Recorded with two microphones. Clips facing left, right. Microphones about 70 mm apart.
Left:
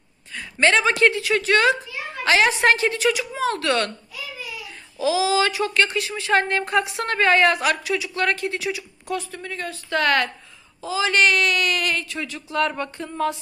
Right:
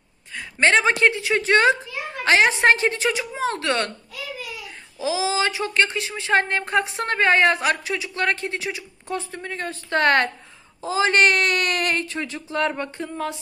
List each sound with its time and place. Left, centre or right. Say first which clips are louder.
0.4 s speech: even; right
5.0 s speech: left 3 dB; right